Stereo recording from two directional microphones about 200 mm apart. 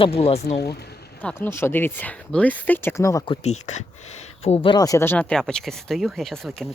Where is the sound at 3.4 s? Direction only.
35° left (ahead or behind); by 6.7 s centre (ahead or behind).